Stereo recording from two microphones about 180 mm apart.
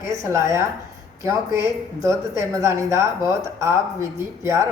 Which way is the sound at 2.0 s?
15° right (ahead or behind).